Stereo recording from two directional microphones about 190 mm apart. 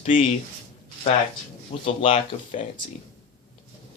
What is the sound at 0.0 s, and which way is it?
Speech, 30° left (ahead or behind).